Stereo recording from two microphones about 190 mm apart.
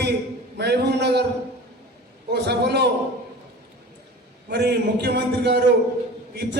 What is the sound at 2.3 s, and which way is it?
Speech, 60° right (ahead or behind).